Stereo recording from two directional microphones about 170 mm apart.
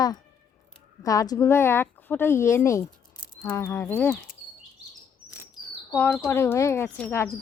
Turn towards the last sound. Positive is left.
turn(degrees=15)  # may be behind; listen again after turning